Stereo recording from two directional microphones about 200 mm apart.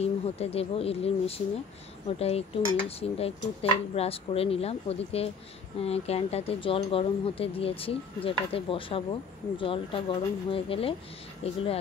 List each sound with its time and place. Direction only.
0.0 s speech: 30° left (ahead or behind)